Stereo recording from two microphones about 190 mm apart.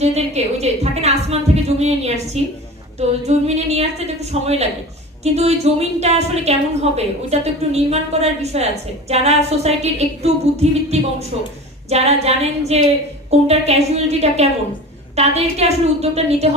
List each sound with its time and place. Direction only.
0.0 s music: 35° right (ahead or behind)
3.0 s a woman's voice: 35° right (ahead or behind)